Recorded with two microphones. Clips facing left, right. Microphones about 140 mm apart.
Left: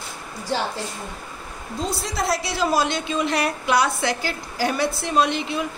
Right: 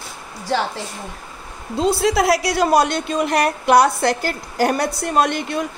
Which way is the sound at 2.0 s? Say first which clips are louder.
Right 7 dB; 85° right.